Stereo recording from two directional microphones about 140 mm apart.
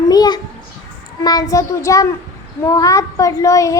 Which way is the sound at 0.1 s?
30° left (ahead or behind).